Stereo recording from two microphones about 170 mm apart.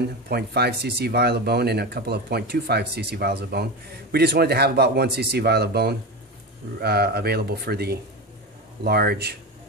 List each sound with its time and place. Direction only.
0.3 s speech: 70° right (ahead or behind)